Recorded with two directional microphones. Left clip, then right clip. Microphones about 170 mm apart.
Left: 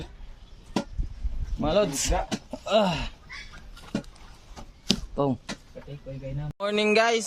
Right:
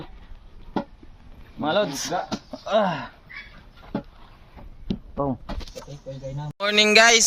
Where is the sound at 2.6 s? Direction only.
25° left (ahead or behind).